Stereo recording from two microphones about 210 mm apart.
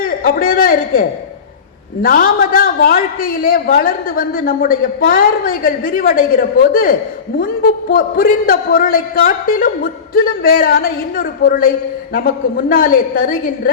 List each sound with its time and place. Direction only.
0.0 s a man's voice: 45° left (ahead or behind)